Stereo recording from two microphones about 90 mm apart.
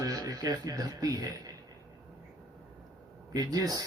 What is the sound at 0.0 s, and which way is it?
Speech, 40° right (ahead or behind).